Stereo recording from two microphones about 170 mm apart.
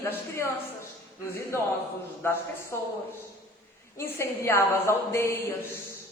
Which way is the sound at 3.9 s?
15° left (ahead or behind).